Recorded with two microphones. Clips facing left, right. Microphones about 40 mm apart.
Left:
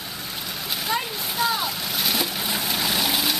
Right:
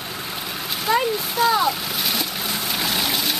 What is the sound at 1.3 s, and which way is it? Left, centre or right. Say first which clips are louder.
Splash: right 5 dB; centre.